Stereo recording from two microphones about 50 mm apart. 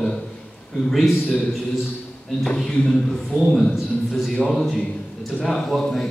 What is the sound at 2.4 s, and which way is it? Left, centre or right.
Speech, centre.